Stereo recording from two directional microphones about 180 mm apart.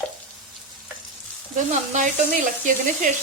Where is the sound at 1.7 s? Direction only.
40° right (ahead or behind).